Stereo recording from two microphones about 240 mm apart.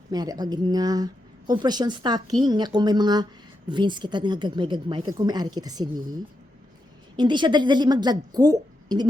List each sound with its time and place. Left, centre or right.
0.1 s a woman's voice: centre
7.2 s a woman's voice: centre